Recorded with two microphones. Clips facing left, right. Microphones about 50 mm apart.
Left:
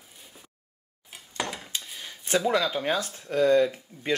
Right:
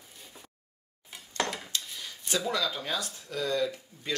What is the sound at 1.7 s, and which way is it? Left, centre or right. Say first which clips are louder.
Speech: even; left.